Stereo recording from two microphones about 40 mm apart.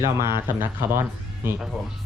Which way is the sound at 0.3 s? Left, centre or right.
Right.